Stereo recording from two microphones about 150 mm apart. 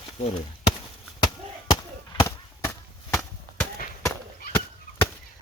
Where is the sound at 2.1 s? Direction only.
20° left (ahead or behind).